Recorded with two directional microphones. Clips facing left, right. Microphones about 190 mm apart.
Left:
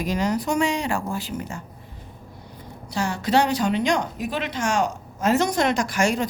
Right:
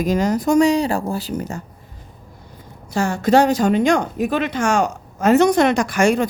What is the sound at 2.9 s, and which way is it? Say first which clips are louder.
Speech: right 6 dB; 50° right (ahead or behind).